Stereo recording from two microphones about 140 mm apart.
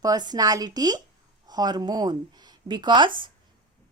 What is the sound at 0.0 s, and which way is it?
A woman's voice, 30° right (ahead or behind).